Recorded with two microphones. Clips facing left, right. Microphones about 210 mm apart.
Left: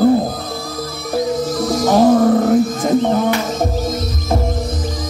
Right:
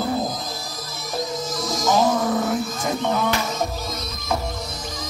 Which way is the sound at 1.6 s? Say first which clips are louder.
Left 7 dB; 60° left (ahead or behind).